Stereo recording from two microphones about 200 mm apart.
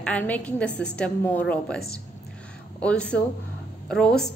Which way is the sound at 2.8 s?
5° left (ahead or behind).